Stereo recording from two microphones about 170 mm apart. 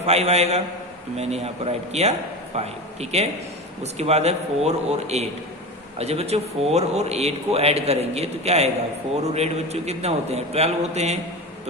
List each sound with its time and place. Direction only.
0.0 s a man's voice: 40° right (ahead or behind)